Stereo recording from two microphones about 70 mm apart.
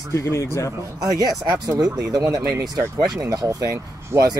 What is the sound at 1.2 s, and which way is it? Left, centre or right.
Speech, right.